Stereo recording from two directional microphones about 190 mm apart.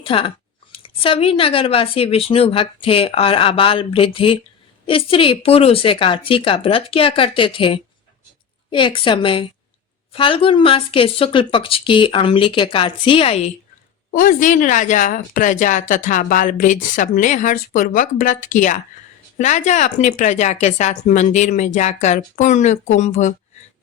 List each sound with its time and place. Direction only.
0.0 s speech: 30° left (ahead or behind)
14.1 s speech: 45° left (ahead or behind)